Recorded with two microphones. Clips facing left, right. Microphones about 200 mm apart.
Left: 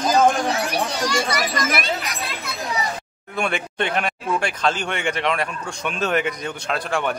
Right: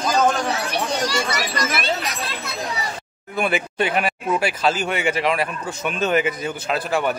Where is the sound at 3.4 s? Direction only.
5° right (ahead or behind).